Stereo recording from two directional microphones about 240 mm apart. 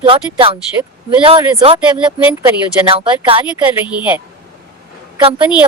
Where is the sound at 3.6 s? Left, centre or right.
Centre.